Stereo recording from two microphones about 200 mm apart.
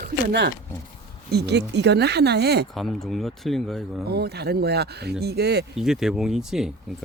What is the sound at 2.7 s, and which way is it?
Speech, centre (ahead or behind).